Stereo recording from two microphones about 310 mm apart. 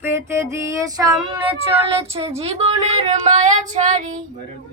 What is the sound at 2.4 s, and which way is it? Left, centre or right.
Female singing, right.